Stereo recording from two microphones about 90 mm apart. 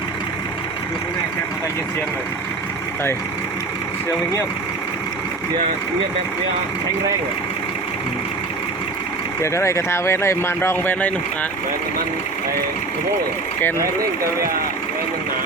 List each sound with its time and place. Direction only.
9.4 s speech: 30° left (ahead or behind)
13.6 s speech: 20° left (ahead or behind)